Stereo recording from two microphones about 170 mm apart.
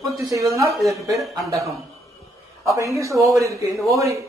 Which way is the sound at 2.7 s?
20° right (ahead or behind).